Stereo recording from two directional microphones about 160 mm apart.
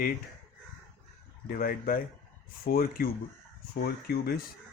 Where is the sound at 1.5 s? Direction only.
65° left (ahead or behind).